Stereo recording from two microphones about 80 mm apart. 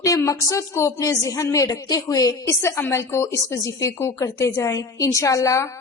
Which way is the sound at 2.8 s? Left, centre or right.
Left.